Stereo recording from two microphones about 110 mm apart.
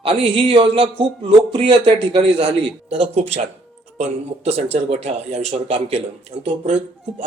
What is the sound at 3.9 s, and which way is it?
Speech, 85° right.